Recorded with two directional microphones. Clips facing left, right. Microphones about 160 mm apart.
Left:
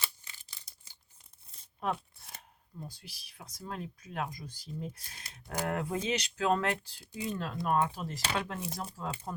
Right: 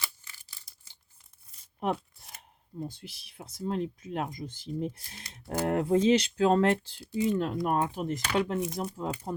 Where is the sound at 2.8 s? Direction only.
25° right (ahead or behind).